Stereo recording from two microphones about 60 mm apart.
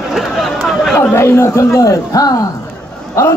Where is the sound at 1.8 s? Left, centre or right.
Left.